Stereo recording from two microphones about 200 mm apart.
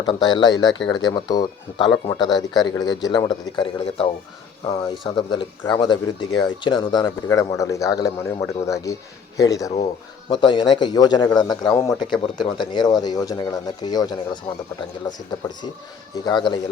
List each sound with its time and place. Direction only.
0.0 s speech: 20° left (ahead or behind)
15.3 s speech: 20° left (ahead or behind)